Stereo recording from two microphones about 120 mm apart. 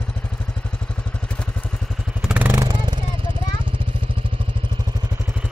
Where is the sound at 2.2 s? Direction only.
10° right (ahead or behind).